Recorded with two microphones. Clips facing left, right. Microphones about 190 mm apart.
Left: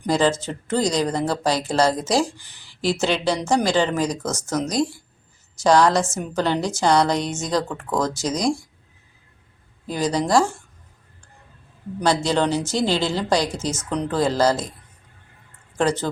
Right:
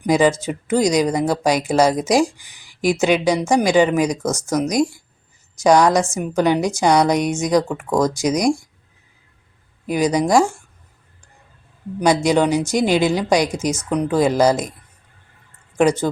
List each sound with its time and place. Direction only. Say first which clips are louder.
0.0 s speech: right 4 dB; 10° right (ahead or behind)
9.8 s speech: right 5 dB; 15° right (ahead or behind)
11.9 s speech: right 4 dB; 15° right (ahead or behind)
15.8 s speech: right 5 dB; 15° right (ahead or behind)